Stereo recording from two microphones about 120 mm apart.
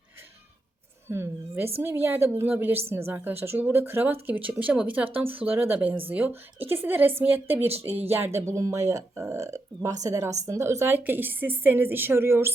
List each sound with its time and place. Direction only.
1.1 s speech: 20° right (ahead or behind)